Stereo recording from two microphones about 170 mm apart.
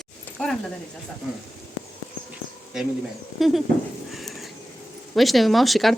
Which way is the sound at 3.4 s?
Centre (ahead or behind).